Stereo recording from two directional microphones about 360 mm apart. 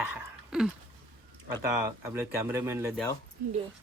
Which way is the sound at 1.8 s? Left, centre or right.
Centre.